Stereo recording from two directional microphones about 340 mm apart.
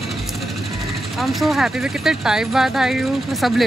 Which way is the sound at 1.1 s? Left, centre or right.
Centre.